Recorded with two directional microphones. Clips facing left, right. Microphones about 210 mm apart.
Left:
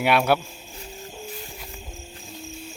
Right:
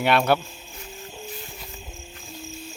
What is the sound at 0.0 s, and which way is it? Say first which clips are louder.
Speech: even; 10° left (ahead or behind).